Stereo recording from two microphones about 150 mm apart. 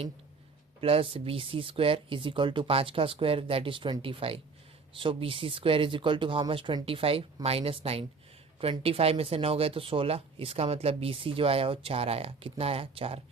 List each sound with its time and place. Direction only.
0.8 s speech: 40° right (ahead or behind)